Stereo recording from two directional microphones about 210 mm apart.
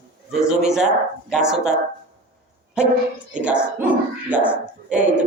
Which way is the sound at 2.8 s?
5° right (ahead or behind).